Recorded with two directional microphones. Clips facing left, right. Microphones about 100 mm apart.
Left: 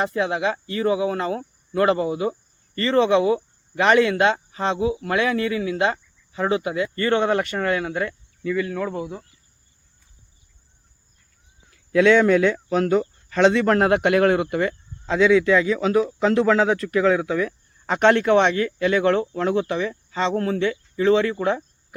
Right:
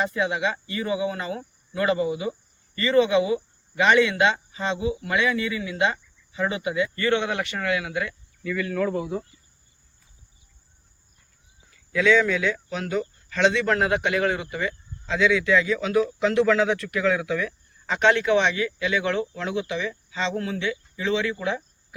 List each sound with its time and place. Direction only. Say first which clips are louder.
0.1 s speech: left 3 dB; 45° left (ahead or behind)
8.6 s speech: right 1 dB; 20° left (ahead or behind)
11.9 s speech: left 5 dB; 60° left (ahead or behind)
15.0 s speech: left 5 dB; 35° left (ahead or behind)
17.8 s speech: left 3 dB; 50° left (ahead or behind)